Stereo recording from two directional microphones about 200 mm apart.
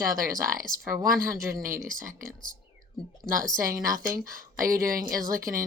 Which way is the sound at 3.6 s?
45° right (ahead or behind).